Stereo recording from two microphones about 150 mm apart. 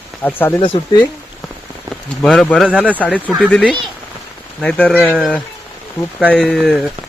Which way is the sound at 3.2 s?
10° right (ahead or behind).